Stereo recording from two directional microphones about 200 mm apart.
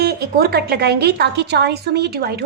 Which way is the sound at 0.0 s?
55° right (ahead or behind).